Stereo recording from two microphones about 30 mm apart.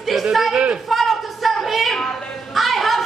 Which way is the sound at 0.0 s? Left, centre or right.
Centre.